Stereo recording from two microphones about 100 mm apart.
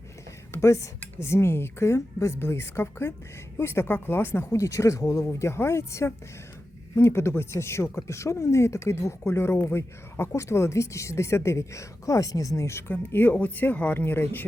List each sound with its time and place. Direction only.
0.5 s speech: 30° left (ahead or behind)